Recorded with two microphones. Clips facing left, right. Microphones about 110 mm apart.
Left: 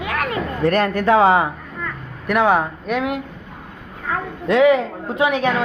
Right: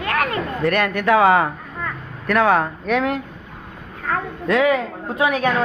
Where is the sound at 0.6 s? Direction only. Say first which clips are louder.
Left 3 dB; 35° left (ahead or behind).